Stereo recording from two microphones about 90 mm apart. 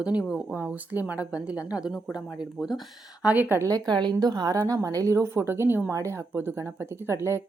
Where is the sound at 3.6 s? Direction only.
45° right (ahead or behind).